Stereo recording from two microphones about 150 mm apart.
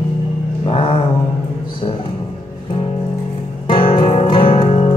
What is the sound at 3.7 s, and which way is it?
Music, 35° left (ahead or behind).